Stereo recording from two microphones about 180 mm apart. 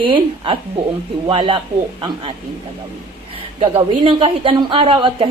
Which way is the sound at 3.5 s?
30° right (ahead or behind).